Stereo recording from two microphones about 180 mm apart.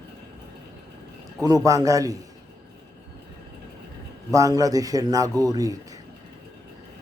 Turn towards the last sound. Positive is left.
turn(degrees=-20)  # may be behind; listen again after turning